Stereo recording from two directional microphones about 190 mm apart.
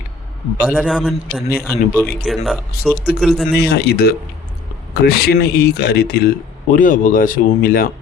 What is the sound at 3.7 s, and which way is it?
A man's voice, 60° left (ahead or behind).